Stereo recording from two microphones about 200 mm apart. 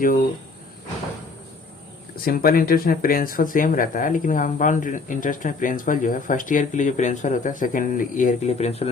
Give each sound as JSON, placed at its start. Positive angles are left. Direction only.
{"t": 2.2, "sound": "speech", "side_deg": 45}